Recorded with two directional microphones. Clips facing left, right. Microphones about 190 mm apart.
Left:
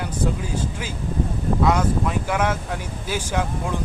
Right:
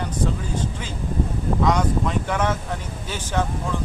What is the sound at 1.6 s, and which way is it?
Speech, 5° left (ahead or behind).